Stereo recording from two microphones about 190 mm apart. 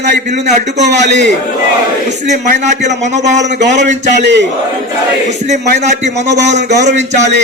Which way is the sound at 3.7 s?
40° right (ahead or behind).